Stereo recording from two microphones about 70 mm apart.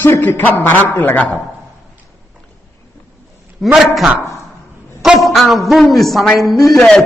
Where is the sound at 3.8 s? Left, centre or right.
Centre.